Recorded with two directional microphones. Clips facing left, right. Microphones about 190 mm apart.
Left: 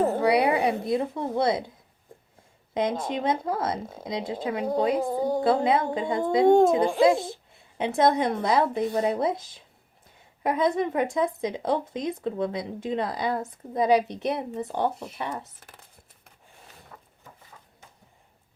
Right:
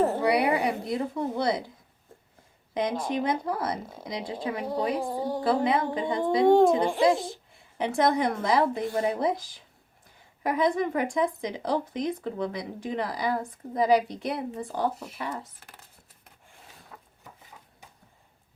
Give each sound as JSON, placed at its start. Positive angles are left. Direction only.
{"t": 0.0, "sound": "a woman's voice", "side_deg": 20}
{"t": 2.7, "sound": "speech", "side_deg": 25}
{"t": 7.0, "sound": "a child's voice", "side_deg": 0}
{"t": 7.8, "sound": "speech", "side_deg": 25}
{"t": 14.9, "sound": "a child's voice", "side_deg": -5}